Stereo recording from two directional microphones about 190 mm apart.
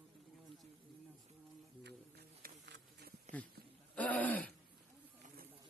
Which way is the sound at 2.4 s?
60° right (ahead or behind).